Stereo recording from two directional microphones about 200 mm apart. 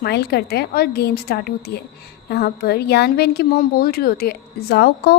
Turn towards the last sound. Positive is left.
turn(degrees=50)  # may be behind; listen again after turning